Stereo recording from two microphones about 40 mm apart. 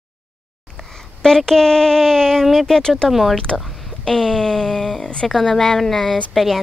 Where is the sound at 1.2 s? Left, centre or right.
Centre.